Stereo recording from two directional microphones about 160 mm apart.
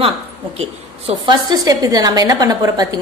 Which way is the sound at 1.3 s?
25° right (ahead or behind).